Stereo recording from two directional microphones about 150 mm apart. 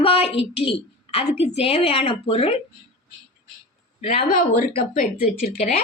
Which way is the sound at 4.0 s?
55° left (ahead or behind).